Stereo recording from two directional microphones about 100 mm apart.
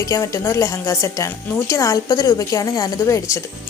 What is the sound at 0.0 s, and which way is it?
A woman's voice, 30° left (ahead or behind).